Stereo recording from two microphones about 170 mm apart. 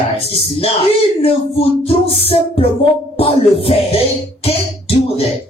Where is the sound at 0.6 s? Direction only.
35° left (ahead or behind).